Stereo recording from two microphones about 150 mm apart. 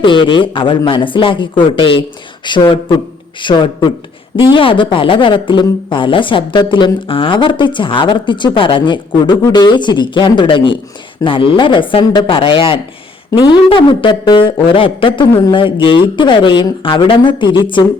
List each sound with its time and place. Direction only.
0.0 s speech: 35° left (ahead or behind)